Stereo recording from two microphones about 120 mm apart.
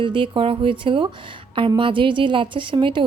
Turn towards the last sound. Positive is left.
turn(degrees=-40)  # may be behind; listen again after turning